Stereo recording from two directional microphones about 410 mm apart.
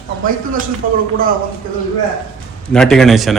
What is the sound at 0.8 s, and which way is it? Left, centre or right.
Speech, centre.